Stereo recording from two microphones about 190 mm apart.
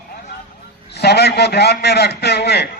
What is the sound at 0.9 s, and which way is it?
A man's voice, 60° left (ahead or behind).